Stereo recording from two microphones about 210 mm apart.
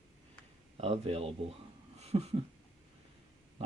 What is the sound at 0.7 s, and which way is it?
Speech, 30° right (ahead or behind).